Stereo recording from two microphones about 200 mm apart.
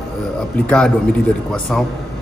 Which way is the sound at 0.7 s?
5° left (ahead or behind).